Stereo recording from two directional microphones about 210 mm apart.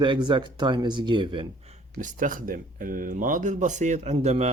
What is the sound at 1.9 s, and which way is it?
Speech, 40° right (ahead or behind).